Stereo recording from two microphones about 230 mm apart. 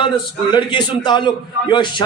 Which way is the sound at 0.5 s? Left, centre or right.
Centre.